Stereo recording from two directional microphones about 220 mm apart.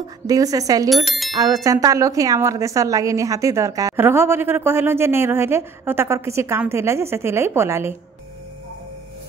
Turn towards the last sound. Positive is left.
turn(degrees=-10)  # may be behind; listen again after turning